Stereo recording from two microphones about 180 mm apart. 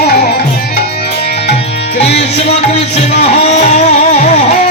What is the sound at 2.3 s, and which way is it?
Music, 35° left (ahead or behind).